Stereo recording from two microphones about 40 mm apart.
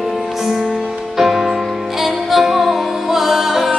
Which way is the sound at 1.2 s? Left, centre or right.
Centre.